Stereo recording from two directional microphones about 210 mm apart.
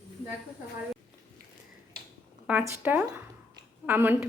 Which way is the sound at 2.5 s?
10° right (ahead or behind).